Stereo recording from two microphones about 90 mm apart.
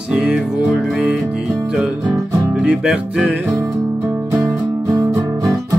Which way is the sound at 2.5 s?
10° right (ahead or behind).